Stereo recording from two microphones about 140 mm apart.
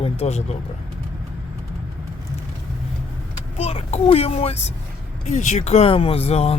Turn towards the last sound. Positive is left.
turn(degrees=45)  # may be behind; listen again after turning